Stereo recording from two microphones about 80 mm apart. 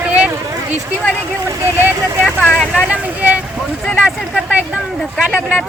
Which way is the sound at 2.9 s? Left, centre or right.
Centre.